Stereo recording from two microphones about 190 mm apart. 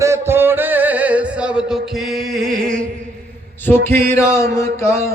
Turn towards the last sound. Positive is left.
turn(degrees=15)  # may be behind; listen again after turning